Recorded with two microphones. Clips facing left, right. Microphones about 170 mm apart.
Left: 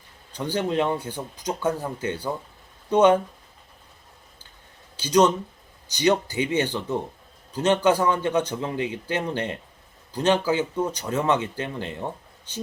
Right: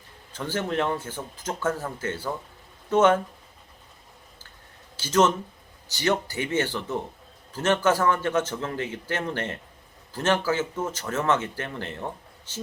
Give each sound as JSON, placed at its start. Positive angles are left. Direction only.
{"t": 0.3, "sound": "speech", "side_deg": 15}
{"t": 4.9, "sound": "speech", "side_deg": 15}